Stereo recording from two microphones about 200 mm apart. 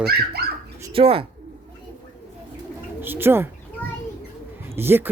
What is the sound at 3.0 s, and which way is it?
Bird, 10° right (ahead or behind).